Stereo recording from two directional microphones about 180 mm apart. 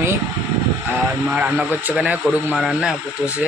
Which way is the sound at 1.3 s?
10° right (ahead or behind).